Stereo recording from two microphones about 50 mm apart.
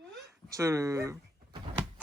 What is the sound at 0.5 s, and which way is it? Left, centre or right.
Speech, right.